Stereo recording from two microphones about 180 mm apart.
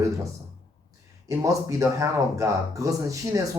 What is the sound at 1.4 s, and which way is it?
Speech, 15° right (ahead or behind).